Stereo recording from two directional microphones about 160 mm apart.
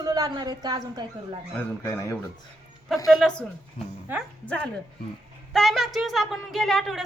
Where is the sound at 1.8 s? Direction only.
20° left (ahead or behind).